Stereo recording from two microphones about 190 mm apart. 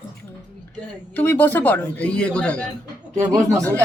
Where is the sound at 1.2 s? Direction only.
10° left (ahead or behind).